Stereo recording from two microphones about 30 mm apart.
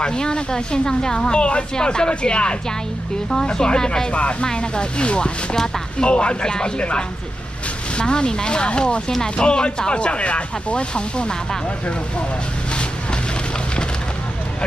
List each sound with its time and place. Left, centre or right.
0.0 s speech: left
4.1 s speech: left
4.5 s speech: left
6.8 s speech: left